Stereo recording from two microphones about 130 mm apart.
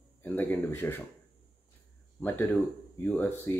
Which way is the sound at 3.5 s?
20° left (ahead or behind).